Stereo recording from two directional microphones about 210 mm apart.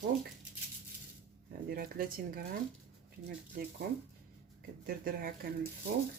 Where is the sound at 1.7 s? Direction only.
45° right (ahead or behind).